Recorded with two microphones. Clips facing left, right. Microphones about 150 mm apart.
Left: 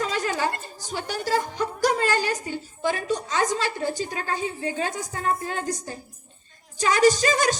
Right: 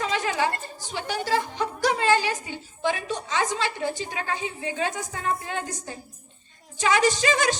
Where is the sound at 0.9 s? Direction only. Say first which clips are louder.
Even; 45° left (ahead or behind).